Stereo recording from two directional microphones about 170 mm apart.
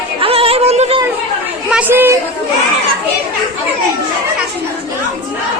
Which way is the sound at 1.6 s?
10° right (ahead or behind).